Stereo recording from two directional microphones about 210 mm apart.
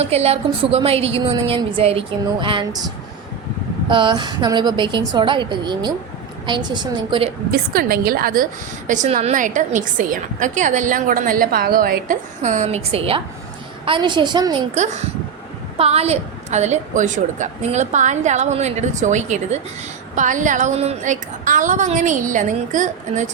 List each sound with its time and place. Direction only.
0.0 s a woman's voice: 30° right (ahead or behind)
3.8 s a woman's voice: 25° right (ahead or behind)
7.5 s a woman's voice: 45° right (ahead or behind); by 14.6 s 20° right (ahead or behind)
14.8 s a woman's voice: 35° right (ahead or behind)